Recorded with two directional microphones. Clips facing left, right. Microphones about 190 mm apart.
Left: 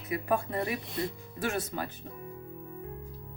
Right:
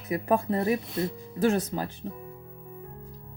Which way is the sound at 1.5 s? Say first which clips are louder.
Right 7 dB; 35° right (ahead or behind).